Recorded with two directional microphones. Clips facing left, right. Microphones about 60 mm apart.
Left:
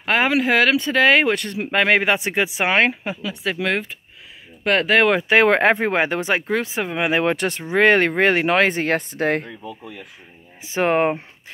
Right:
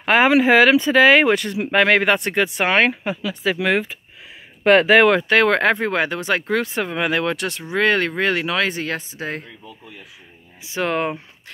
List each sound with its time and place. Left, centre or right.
0.0 s speech: centre
0.9 s speech: centre
4.9 s speech: centre
5.3 s speech: left
6.4 s speech: centre
7.1 s speech: left
10.6 s speech: left